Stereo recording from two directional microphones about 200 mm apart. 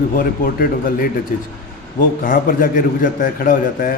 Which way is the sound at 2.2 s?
45° left (ahead or behind).